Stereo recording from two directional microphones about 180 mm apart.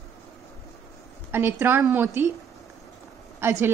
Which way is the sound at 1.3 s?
10° right (ahead or behind).